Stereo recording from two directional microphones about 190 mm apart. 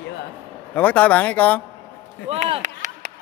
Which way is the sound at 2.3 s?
35° right (ahead or behind).